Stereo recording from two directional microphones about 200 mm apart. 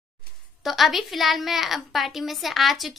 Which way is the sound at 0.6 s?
Centre (ahead or behind).